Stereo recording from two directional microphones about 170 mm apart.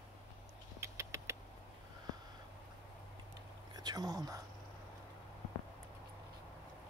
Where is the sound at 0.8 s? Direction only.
15° right (ahead or behind).